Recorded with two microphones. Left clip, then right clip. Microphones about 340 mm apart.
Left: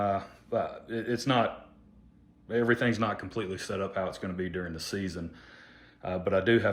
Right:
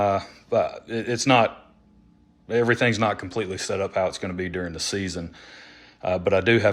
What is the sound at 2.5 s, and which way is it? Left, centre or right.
Speech, centre.